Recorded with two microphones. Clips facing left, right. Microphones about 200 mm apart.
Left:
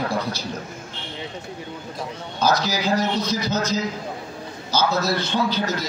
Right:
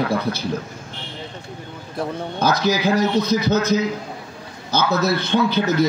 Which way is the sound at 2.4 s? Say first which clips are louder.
Right 2 dB; 55° right (ahead or behind).